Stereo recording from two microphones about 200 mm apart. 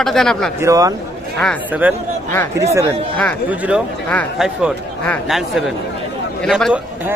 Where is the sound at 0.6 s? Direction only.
15° right (ahead or behind).